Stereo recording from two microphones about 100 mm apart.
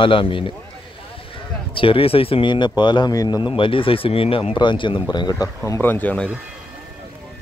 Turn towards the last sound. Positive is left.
turn(degrees=15)  # may be behind; listen again after turning